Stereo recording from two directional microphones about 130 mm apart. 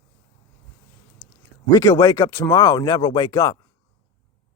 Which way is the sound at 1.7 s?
30° left (ahead or behind).